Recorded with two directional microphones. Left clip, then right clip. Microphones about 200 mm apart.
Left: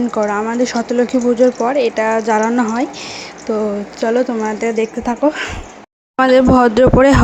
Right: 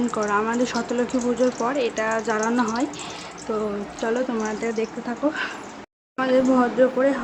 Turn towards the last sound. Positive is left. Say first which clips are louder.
# left 10 dB
turn(degrees=55)  # may be behind; listen again after turning